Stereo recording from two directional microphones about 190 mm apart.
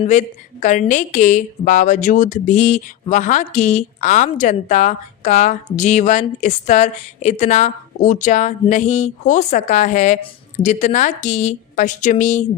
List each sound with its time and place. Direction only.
0.0 s a woman's voice: 40° left (ahead or behind)